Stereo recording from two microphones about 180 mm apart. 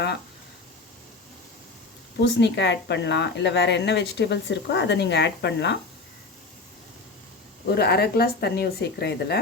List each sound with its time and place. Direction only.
2.2 s speech: 75° left (ahead or behind)
7.8 s speech: 60° left (ahead or behind)